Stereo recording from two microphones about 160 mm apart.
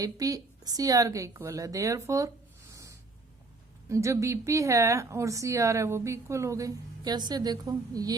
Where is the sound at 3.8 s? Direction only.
20° right (ahead or behind).